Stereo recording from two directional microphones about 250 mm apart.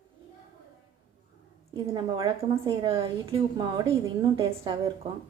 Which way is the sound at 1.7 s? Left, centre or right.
Centre.